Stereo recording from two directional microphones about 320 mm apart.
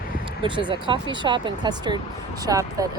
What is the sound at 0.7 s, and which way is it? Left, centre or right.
Speech, centre.